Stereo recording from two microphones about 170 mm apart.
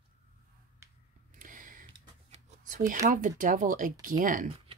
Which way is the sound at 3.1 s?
55° right (ahead or behind).